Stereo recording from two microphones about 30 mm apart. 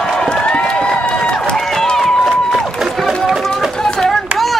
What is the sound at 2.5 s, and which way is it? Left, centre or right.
Run, centre.